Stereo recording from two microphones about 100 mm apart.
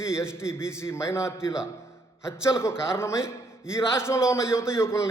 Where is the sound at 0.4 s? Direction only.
25° left (ahead or behind).